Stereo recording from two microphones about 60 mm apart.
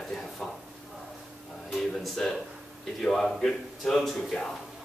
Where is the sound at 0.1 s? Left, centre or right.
Centre.